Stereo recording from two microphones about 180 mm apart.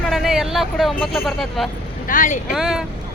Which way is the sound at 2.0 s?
45° left (ahead or behind).